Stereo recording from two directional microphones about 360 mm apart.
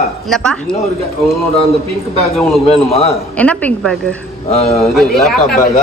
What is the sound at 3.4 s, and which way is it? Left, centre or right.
Speech, centre.